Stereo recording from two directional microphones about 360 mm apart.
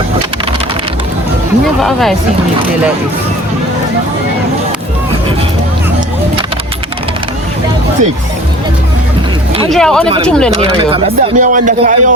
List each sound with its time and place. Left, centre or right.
1.8 s speech: centre
9.6 s speech: centre
10.5 s speech: centre